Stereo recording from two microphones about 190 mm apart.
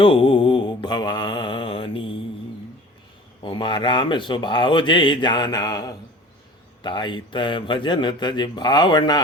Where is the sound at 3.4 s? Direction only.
25° left (ahead or behind).